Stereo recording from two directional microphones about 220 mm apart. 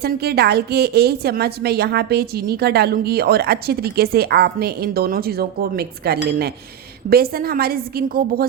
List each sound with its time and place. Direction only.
0.0 s a woman's voice: 45° right (ahead or behind)